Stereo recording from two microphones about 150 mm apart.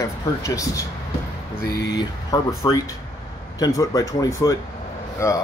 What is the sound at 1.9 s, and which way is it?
Speech, 25° left (ahead or behind).